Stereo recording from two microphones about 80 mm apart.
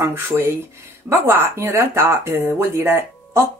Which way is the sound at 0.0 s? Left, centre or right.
Right.